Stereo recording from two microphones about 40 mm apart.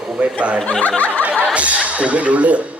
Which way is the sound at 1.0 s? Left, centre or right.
Left.